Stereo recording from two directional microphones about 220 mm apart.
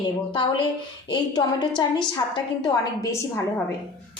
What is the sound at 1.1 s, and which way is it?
A woman's voice, 20° left (ahead or behind).